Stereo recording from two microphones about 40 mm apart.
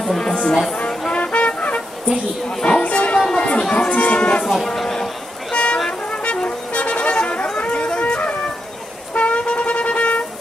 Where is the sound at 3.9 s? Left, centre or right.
Left.